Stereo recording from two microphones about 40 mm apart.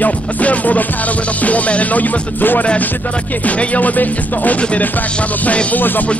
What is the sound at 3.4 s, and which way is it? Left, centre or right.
Music, left.